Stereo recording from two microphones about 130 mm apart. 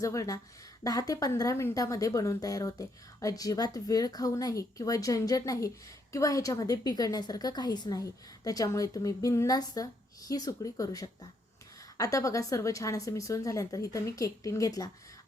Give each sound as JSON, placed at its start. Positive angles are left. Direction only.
{"t": 0.0, "sound": "a woman's voice", "side_deg": 25}